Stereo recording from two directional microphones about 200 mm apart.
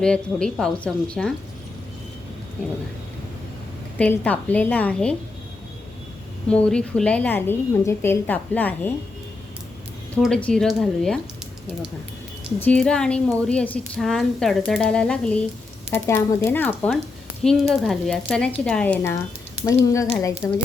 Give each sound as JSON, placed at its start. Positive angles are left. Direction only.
{"t": 0.0, "sound": "speech", "side_deg": 5}
{"t": 3.9, "sound": "a woman's voice", "side_deg": 5}
{"t": 6.5, "sound": "a woman's voice", "side_deg": 5}
{"t": 10.2, "sound": "speech", "side_deg": 5}
{"t": 12.6, "sound": "a woman's voice", "side_deg": 5}